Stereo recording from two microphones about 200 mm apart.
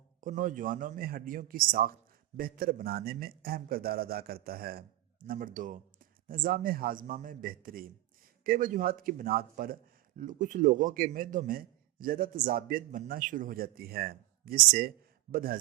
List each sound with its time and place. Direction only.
0.2 s a man's voice: 40° right (ahead or behind)